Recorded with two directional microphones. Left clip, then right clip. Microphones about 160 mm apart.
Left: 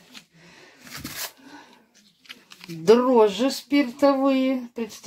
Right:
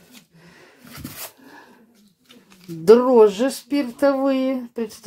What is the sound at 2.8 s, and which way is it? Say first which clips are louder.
Speech: right 4 dB; 10° right (ahead or behind).